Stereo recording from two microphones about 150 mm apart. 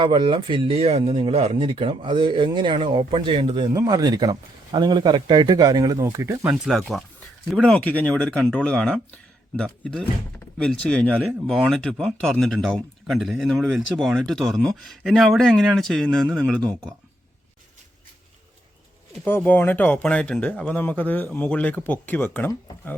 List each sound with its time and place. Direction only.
0.0 s speech: 30° right (ahead or behind)
6.5 s speech: centre (ahead or behind)
19.2 s speech: 15° left (ahead or behind)